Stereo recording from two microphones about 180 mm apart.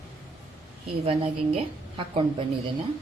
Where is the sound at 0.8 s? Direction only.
30° right (ahead or behind).